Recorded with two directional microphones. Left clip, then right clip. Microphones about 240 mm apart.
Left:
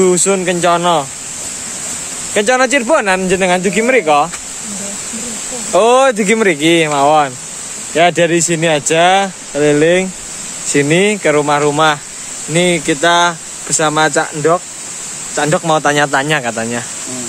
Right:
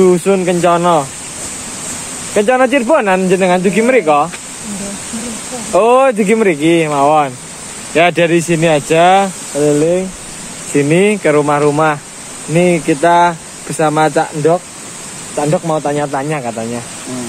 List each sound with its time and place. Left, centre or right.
0.0 s speech: centre
2.3 s speech: centre
5.7 s speech: centre
7.9 s speech: centre
9.6 s speech: left
10.7 s speech: centre
15.3 s speech: left
15.6 s speech: left